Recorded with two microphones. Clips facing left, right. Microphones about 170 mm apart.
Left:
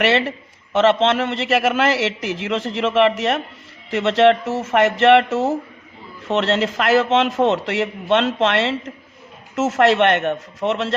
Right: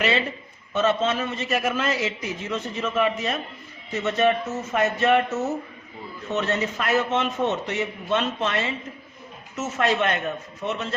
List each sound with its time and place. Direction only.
0.0 s a man's voice: 75° left (ahead or behind)
3.9 s a man's voice: 90° left